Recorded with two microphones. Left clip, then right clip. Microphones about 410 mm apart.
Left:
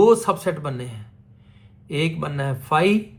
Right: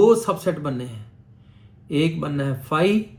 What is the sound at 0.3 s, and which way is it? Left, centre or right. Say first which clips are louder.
Speech: right 1 dB; left.